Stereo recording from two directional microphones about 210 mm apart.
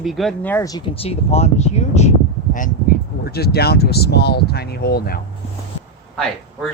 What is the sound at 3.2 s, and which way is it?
Speech, 50° left (ahead or behind).